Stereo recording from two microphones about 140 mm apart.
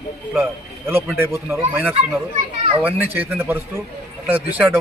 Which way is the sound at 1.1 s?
20° right (ahead or behind).